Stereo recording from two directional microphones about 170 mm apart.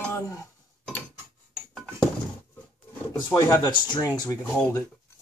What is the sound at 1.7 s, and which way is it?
Dishes, 5° left (ahead or behind).